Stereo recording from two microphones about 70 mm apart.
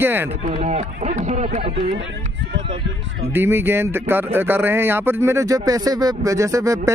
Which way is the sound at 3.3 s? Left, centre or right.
Right.